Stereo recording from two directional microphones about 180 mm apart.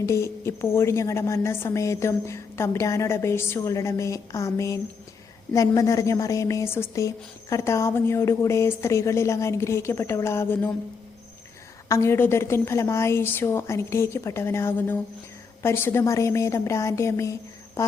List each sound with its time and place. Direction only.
0.0 s a woman's voice: 15° left (ahead or behind)
11.9 s a woman's voice: 15° left (ahead or behind)